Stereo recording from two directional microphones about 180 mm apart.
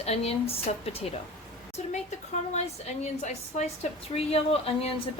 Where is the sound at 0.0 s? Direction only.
35° left (ahead or behind).